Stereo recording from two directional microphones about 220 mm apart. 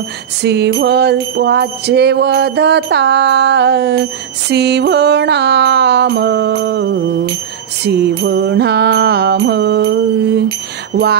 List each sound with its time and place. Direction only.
0.4 s jingle bell: 50° right (ahead or behind)